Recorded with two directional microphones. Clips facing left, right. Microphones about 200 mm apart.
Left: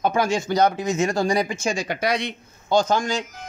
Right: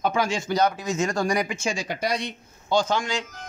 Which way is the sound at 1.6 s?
55° left (ahead or behind).